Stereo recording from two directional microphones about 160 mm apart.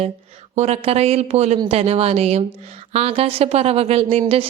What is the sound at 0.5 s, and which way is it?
A woman's voice, 40° right (ahead or behind).